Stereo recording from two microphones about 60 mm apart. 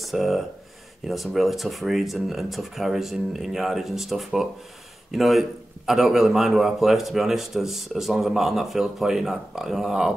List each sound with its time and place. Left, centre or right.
0.0 s speech: centre